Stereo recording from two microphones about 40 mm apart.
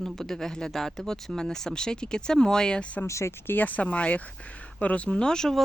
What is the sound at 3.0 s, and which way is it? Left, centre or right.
Speech, left.